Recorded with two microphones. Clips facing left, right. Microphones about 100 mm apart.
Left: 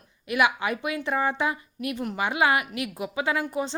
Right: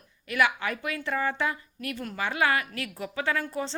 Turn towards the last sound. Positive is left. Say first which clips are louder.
# left 3 dB
turn(degrees=15)  # may be behind; listen again after turning